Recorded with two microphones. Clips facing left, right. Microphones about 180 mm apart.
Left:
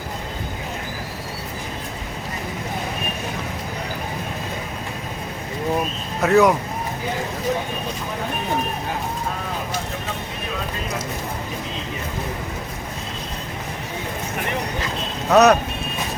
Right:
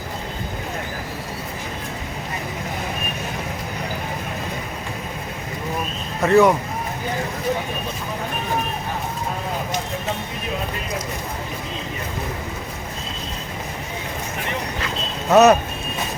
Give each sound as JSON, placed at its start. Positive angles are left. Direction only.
{"t": 6.2, "sound": "speech", "side_deg": 0}
{"t": 15.3, "sound": "speech", "side_deg": -5}